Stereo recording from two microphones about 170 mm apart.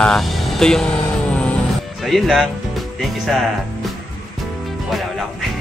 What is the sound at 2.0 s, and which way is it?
Music, centre (ahead or behind).